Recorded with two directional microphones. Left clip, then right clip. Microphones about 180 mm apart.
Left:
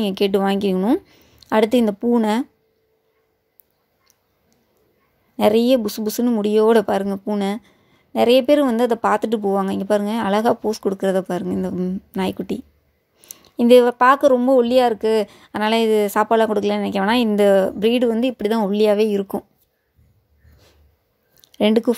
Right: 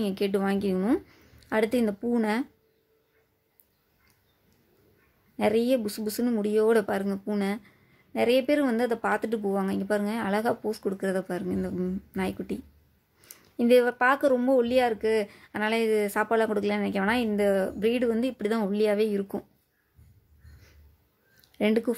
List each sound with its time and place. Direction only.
0.0 s a woman's voice: 35° left (ahead or behind)
1.5 s speech: 35° left (ahead or behind)
5.4 s speech: 35° left (ahead or behind)
21.5 s speech: 40° left (ahead or behind)